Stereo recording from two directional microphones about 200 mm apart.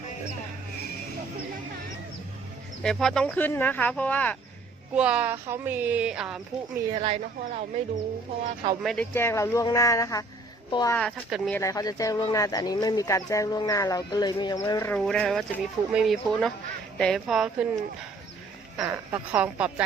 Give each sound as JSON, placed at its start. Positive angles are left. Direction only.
{"t": 2.8, "sound": "speech", "side_deg": 0}
{"t": 4.9, "sound": "speech", "side_deg": -5}
{"t": 6.9, "sound": "speech", "side_deg": -30}
{"t": 8.8, "sound": "speech", "side_deg": 0}
{"t": 9.1, "sound": "a woman's voice", "side_deg": 10}
{"t": 10.9, "sound": "speech", "side_deg": 0}
{"t": 11.5, "sound": "speech", "side_deg": 15}
{"t": 14.9, "sound": "speech", "side_deg": 0}
{"t": 18.8, "sound": "speech", "side_deg": -10}